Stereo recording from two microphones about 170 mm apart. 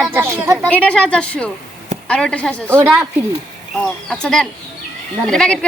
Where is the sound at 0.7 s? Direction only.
5° left (ahead or behind).